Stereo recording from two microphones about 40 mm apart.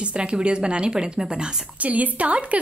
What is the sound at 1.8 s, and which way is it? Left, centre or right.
Speech, right.